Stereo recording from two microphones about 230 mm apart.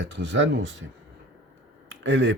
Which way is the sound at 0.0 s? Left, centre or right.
Right.